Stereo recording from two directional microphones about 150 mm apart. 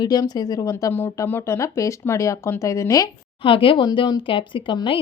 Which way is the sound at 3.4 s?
35° left (ahead or behind).